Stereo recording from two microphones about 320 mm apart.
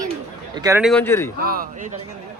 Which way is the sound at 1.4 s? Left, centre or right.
Right.